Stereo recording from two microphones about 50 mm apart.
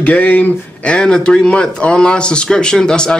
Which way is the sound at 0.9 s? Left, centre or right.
Centre.